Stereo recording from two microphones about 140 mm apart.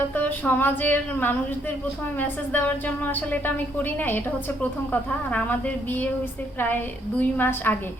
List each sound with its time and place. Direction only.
0.1 s a woman's voice: 15° left (ahead or behind)
7.2 s a woman's voice: 15° left (ahead or behind)